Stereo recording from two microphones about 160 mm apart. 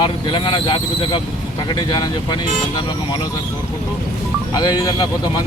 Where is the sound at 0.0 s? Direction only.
30° left (ahead or behind).